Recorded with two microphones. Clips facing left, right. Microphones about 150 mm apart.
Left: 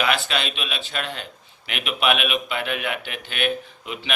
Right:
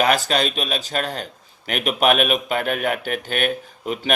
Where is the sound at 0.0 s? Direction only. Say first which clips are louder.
Right 5 dB; 40° right (ahead or behind).